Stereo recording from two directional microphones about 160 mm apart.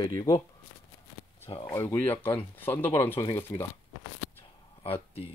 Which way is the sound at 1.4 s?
35° left (ahead or behind).